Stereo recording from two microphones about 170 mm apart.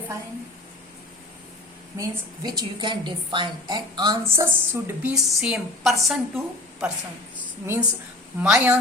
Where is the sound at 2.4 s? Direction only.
25° right (ahead or behind).